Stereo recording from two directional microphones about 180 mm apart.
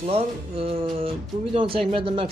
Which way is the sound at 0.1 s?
35° right (ahead or behind).